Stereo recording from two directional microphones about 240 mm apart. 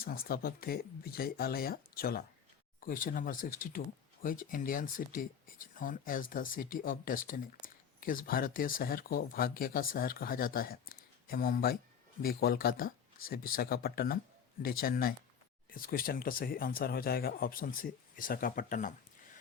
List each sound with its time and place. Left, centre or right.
0.0 s speech: left